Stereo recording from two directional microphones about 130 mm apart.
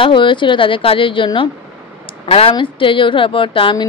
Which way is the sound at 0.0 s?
40° left (ahead or behind).